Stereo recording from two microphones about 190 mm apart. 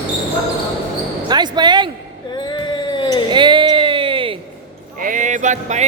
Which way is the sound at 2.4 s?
25° left (ahead or behind).